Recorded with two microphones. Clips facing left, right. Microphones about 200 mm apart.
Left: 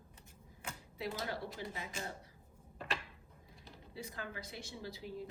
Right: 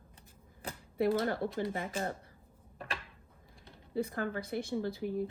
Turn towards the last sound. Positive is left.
turn(degrees=-55)  # may be behind; listen again after turning